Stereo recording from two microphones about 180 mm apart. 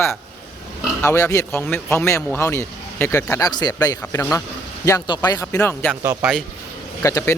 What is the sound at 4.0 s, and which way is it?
Speech, 10° left (ahead or behind).